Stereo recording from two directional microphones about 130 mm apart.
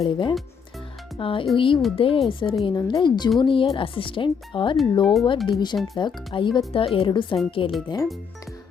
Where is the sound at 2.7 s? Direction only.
30° left (ahead or behind).